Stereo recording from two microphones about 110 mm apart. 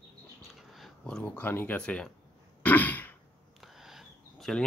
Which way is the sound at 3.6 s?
Centre (ahead or behind).